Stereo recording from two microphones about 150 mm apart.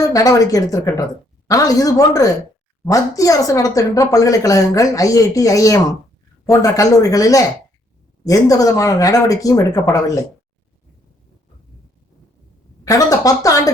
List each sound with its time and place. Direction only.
0.0 s speech: 20° left (ahead or behind)
12.8 s speech: 20° left (ahead or behind)